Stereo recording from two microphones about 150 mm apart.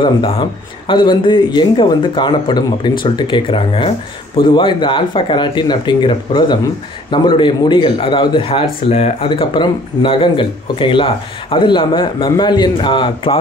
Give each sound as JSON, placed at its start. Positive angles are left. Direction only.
{"t": 0.0, "sound": "speech", "side_deg": 35}